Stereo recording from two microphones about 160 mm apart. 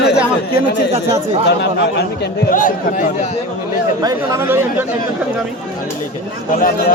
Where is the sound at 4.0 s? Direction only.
20° right (ahead or behind).